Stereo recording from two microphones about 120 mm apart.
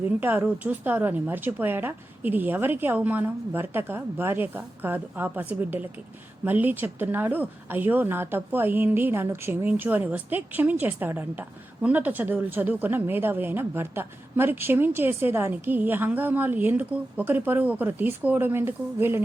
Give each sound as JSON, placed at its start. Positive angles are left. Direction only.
{"t": 0.2, "sound": "speech", "side_deg": -15}